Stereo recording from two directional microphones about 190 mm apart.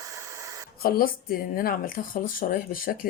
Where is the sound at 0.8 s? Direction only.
50° left (ahead or behind).